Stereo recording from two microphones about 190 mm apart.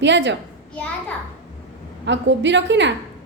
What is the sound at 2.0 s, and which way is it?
Speech, 70° right (ahead or behind).